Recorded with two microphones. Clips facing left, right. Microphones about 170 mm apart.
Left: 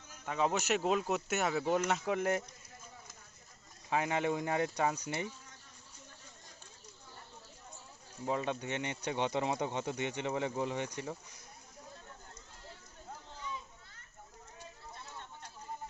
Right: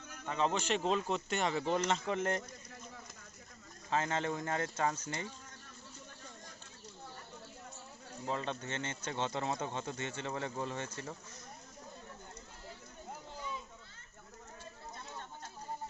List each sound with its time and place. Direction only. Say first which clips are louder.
0.3 s speech: left 1 dB; 10° left (ahead or behind)
3.8 s speech: left 2 dB; 15° left (ahead or behind)
8.3 s speech: left 3 dB; 15° left (ahead or behind)